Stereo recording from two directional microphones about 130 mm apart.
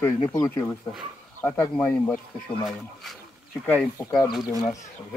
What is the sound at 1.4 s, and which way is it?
Speech, 15° left (ahead or behind).